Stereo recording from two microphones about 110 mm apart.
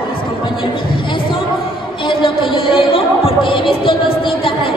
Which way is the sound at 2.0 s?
50° left (ahead or behind).